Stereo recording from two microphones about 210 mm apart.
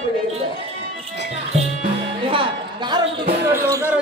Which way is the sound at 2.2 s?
25° right (ahead or behind).